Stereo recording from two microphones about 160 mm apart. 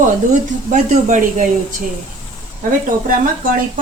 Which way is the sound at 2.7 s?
60° right (ahead or behind).